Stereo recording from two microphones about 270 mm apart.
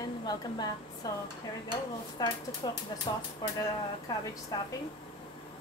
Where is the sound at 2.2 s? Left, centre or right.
Centre.